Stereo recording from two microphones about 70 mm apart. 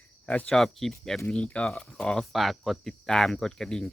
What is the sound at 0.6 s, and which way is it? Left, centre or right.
Speech, centre.